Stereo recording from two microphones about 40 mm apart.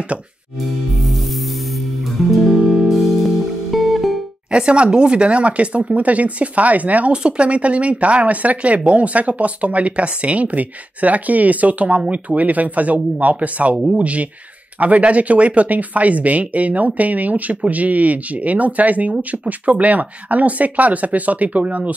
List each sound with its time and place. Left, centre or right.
2.3 s music: centre
4.5 s speech: right
7.1 s speech: right